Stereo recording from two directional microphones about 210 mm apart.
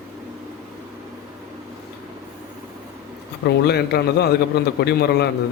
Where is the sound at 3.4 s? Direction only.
50° left (ahead or behind).